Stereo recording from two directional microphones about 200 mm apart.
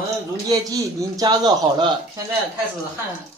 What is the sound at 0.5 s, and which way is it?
Speech, 20° right (ahead or behind).